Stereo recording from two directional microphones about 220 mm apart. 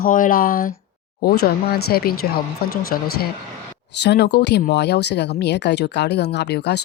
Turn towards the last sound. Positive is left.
turn(degrees=50)  # may be behind; listen again after turning